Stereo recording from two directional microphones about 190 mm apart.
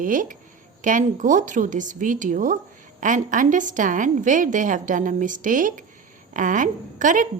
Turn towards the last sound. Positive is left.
turn(degrees=-45)  # may be behind; listen again after turning